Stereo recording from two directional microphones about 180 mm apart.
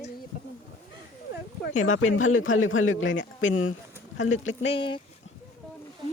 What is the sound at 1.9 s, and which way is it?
A man's voice, 90° left.